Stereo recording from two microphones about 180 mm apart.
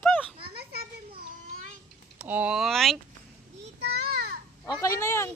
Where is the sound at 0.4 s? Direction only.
60° right (ahead or behind).